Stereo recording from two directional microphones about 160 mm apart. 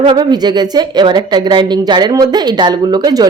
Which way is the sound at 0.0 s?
30° right (ahead or behind).